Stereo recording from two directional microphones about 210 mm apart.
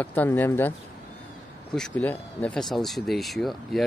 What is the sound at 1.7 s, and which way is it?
Speech, 5° left (ahead or behind).